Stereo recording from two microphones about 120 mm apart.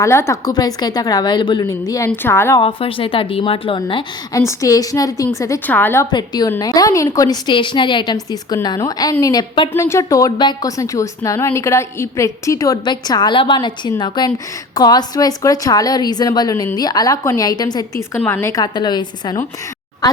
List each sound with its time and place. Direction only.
0.0 s a woman's voice: 25° left (ahead or behind)
2.0 s a woman's voice: 20° left (ahead or behind)
2.6 s speech: 50° left (ahead or behind)
4.4 s a woman's voice: 25° left (ahead or behind)
5.6 s a woman's voice: 15° left (ahead or behind)
6.1 s a woman's voice: 35° left (ahead or behind)
18.2 s a woman's voice: 20° left (ahead or behind)
18.5 s a woman's voice: 35° left (ahead or behind)